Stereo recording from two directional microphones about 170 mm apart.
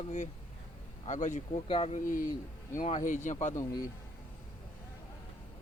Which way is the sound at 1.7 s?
35° left (ahead or behind).